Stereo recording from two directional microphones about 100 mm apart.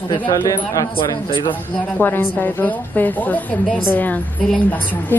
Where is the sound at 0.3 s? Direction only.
35° left (ahead or behind).